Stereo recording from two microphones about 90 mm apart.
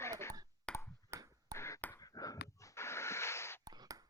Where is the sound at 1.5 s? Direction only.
30° left (ahead or behind).